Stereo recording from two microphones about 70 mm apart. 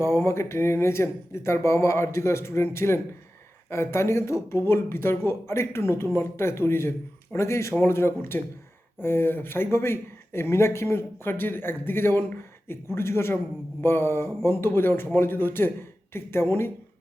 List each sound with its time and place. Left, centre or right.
0.0 s speech: left